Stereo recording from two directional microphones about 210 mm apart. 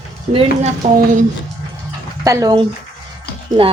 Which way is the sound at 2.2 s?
15° right (ahead or behind).